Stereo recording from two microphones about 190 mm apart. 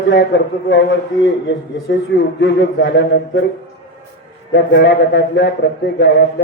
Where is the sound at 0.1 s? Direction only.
70° left (ahead or behind).